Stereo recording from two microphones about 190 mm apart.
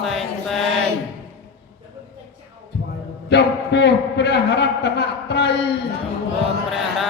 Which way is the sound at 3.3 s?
65° left (ahead or behind).